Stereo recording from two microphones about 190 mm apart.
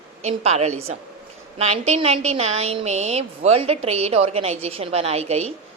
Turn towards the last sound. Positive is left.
turn(degrees=-35)  # may be behind; listen again after turning